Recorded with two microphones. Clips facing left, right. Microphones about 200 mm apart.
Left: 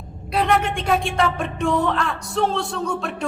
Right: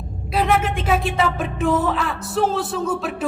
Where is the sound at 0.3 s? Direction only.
Centre (ahead or behind).